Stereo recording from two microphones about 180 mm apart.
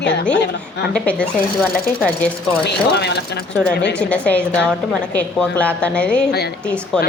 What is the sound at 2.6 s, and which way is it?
Speech, 65° left (ahead or behind).